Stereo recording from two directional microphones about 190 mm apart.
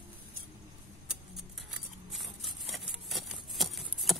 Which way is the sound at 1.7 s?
Centre (ahead or behind).